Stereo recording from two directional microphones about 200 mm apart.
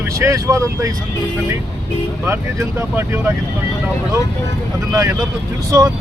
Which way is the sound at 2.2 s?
10° right (ahead or behind).